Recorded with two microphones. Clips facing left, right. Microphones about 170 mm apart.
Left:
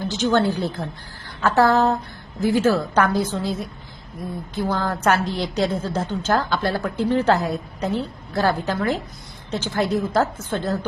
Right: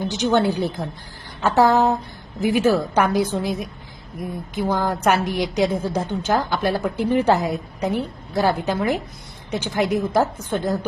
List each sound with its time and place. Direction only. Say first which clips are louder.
0.0 s a woman's voice: right 1 dB; 15° right (ahead or behind)